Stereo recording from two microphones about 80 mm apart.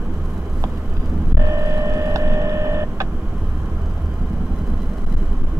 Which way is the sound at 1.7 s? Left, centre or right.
Right.